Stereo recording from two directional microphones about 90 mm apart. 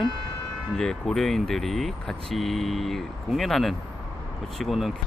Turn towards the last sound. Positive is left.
turn(degrees=0)  # may be behind; listen again after turning